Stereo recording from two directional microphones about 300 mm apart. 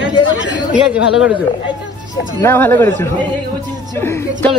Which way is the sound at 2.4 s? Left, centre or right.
Centre.